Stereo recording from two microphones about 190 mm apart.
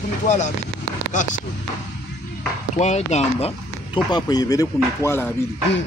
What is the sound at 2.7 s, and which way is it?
Speech, 35° left (ahead or behind).